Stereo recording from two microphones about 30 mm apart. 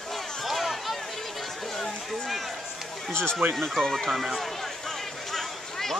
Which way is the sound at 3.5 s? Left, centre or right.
Centre.